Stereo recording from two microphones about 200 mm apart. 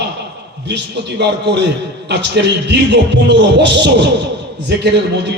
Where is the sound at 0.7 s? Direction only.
60° right (ahead or behind).